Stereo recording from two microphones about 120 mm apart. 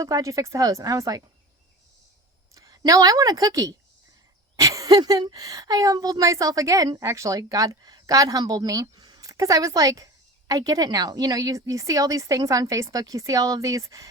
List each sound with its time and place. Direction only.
0.0 s speech: 25° right (ahead or behind)
2.6 s a woman's voice: 30° right (ahead or behind)